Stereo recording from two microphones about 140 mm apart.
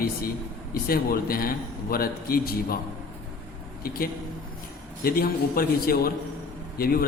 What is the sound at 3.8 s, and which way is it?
A man's voice, 90° left.